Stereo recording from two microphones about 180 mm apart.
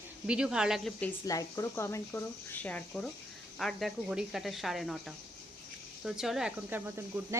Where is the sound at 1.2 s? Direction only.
15° left (ahead or behind); by 5.0 s centre (ahead or behind).